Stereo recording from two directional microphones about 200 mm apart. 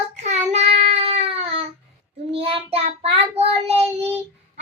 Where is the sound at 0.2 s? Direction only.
35° right (ahead or behind).